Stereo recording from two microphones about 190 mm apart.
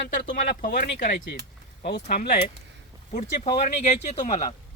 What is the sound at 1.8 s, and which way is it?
Speech, 60° left (ahead or behind).